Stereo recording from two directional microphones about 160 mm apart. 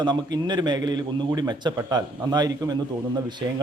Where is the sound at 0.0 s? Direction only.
25° right (ahead or behind).